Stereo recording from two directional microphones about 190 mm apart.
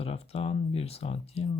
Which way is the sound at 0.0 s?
30° left (ahead or behind).